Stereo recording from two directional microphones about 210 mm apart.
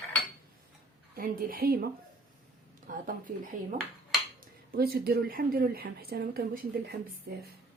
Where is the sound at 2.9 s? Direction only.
40° right (ahead or behind).